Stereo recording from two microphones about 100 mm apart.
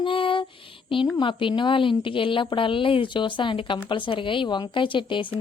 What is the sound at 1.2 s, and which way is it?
A woman's voice, 55° left (ahead or behind).